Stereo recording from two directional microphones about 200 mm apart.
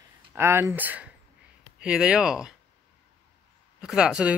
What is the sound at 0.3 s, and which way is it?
Speech, 10° right (ahead or behind).